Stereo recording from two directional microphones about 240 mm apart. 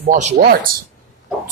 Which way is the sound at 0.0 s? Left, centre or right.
Right.